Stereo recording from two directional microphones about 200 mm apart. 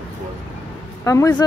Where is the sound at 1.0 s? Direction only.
15° left (ahead or behind).